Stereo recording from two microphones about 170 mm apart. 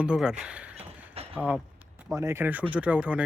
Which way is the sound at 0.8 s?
35° right (ahead or behind).